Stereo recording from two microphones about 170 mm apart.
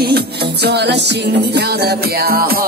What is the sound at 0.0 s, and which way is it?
Music, 70° right (ahead or behind).